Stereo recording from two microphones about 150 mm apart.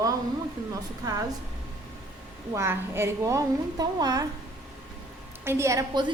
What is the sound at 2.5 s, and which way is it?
A woman's voice, 15° right (ahead or behind).